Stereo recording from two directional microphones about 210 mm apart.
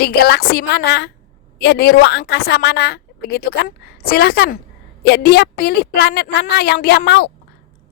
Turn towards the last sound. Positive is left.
turn(degrees=50)  # may be behind; listen again after turning